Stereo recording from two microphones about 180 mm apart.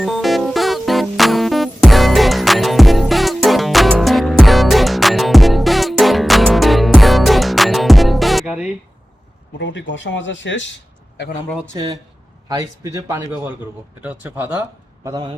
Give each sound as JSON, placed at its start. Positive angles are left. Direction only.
{"t": 0.0, "sound": "music", "side_deg": 0}
{"t": 9.6, "sound": "speech", "side_deg": 85}
{"t": 11.7, "sound": "a man's voice", "side_deg": -25}
{"t": 15.0, "sound": "a man's voice", "side_deg": -20}